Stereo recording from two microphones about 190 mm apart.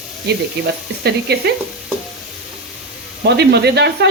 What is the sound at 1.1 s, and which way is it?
Speech, 60° right (ahead or behind).